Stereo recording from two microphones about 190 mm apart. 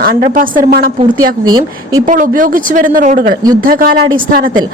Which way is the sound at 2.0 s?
45° right (ahead or behind).